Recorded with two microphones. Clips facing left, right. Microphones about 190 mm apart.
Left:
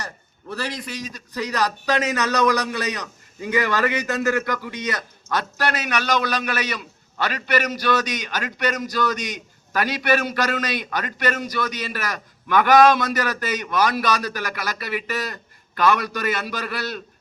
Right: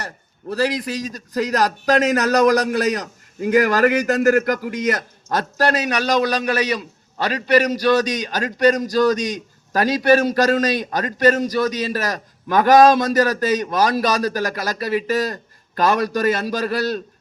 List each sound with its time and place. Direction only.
0.0 s a man's voice: 35° right (ahead or behind)